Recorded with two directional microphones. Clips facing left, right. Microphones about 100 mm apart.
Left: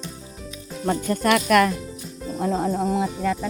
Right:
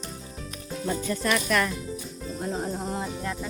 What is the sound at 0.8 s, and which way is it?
Speech, 50° left (ahead or behind).